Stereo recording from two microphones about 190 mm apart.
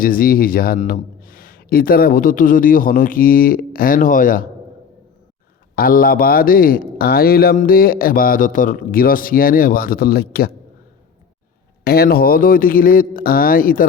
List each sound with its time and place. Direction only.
0.0 s a man's voice: 50° left (ahead or behind)
5.7 s a man's voice: 50° left (ahead or behind)
11.9 s a man's voice: 55° left (ahead or behind)